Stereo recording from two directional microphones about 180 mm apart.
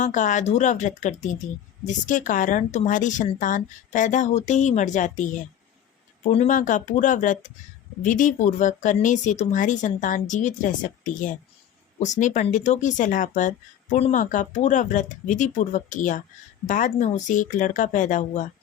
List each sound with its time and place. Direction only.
0.0 s a woman's voice: 45° left (ahead or behind)
6.3 s a woman's voice: 40° left (ahead or behind)